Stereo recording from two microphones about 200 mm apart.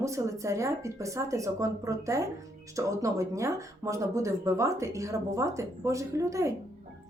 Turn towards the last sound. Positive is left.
turn(degrees=-15)  # may be behind; listen again after turning